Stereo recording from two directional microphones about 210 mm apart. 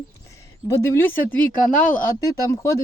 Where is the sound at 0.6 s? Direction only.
15° left (ahead or behind).